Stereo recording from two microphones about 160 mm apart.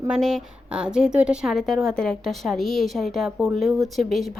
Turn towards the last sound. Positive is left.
turn(degrees=0)  # may be behind; listen again after turning